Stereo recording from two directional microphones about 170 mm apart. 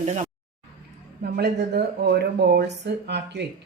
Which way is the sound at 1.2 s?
75° right (ahead or behind).